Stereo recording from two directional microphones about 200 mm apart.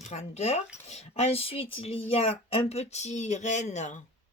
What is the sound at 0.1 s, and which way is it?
Speech, 30° left (ahead or behind).